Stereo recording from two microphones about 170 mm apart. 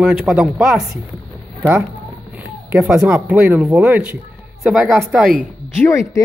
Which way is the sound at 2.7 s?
5° right (ahead or behind).